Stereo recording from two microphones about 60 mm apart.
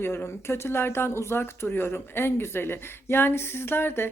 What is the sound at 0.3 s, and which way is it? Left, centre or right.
Speech, left.